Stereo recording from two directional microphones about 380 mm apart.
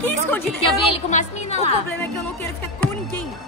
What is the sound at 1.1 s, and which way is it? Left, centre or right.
Speech, centre.